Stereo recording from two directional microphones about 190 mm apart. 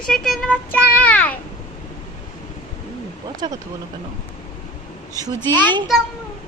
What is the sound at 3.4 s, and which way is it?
Speech, 25° right (ahead or behind).